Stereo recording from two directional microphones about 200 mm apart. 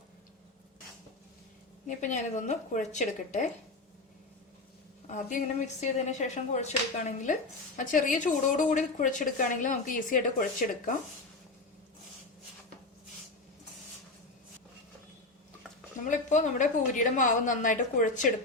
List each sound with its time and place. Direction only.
1.9 s a woman's voice: 35° left (ahead or behind)
5.0 s a woman's voice: 40° left (ahead or behind)
16.0 s a woman's voice: 40° left (ahead or behind)